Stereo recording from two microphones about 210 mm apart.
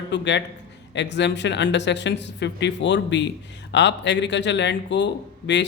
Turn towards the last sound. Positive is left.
turn(degrees=55)  # may be behind; listen again after turning